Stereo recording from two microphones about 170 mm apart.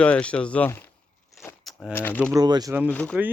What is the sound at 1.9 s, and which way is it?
Speech, 10° left (ahead or behind).